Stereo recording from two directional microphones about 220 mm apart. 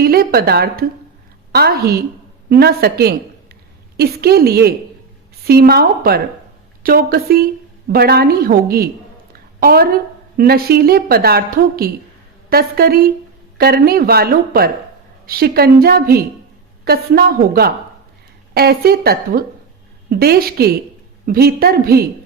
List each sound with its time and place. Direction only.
0.0 s a woman's voice: 45° right (ahead or behind)